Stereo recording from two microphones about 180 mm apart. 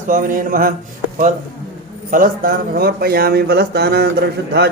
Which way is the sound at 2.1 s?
50° right (ahead or behind).